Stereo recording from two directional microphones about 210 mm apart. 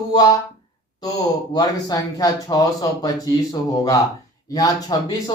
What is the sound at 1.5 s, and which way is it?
Speech, 20° left (ahead or behind).